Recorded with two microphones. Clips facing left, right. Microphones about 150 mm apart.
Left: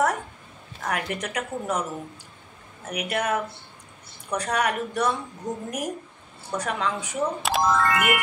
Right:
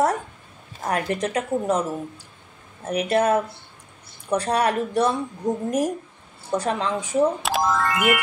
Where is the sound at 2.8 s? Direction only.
30° right (ahead or behind).